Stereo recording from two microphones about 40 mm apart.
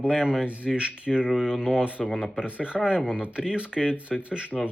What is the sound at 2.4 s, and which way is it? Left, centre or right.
Speech, right.